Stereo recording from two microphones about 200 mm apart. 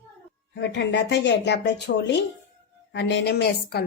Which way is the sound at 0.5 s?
60° left (ahead or behind).